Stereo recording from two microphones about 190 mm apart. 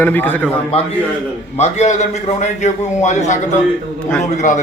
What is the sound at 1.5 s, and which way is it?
A man's voice, 35° left (ahead or behind).